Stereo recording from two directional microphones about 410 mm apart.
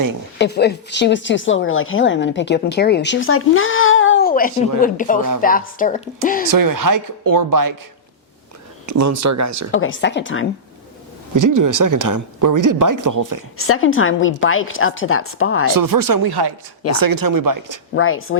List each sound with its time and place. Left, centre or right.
0.3 s speech: left
6.5 s speech: right
8.9 s speech: right
9.7 s speech: left
11.3 s speech: right
13.7 s speech: left
15.7 s speech: right
17.9 s speech: left